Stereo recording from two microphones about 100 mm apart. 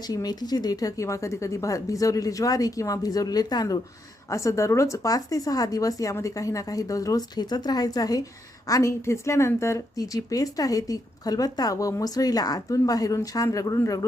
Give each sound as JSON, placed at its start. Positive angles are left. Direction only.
{"t": 0.1, "sound": "a woman's voice", "side_deg": 40}